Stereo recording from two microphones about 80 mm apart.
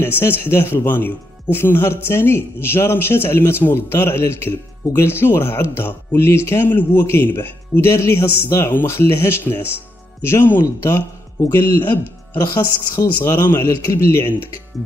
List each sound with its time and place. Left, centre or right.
0.2 s speech: left
12.9 s speech: left